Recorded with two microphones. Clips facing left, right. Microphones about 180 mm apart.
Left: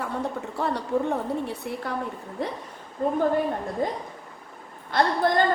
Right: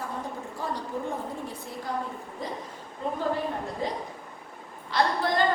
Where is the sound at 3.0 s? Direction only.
50° left (ahead or behind).